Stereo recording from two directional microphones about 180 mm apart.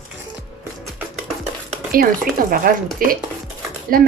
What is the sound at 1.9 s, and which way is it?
Speech, 55° right (ahead or behind).